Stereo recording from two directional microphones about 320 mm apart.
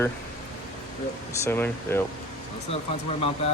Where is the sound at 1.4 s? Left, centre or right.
Centre.